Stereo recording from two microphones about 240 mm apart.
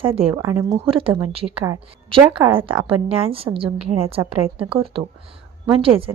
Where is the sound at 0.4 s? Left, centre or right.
Centre.